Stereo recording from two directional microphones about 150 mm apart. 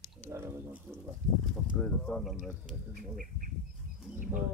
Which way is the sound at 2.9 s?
65° right (ahead or behind).